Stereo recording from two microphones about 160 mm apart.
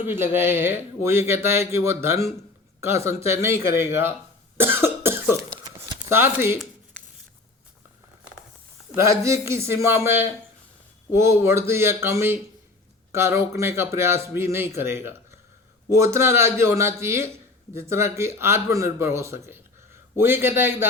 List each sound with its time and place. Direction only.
0.0 s speech: 15° right (ahead or behind)
4.5 s cough: 15° right (ahead or behind)
5.6 s a sound: 15° right (ahead or behind)
9.0 s speech: 20° right (ahead or behind)